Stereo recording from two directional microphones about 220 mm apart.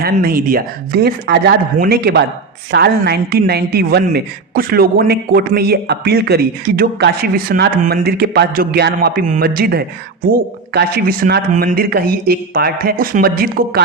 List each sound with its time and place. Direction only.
0.0 s a woman's voice: 40° right (ahead or behind)